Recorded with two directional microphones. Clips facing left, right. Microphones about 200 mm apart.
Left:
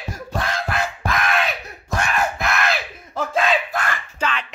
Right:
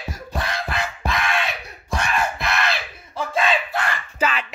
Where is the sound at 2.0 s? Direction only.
45° left (ahead or behind).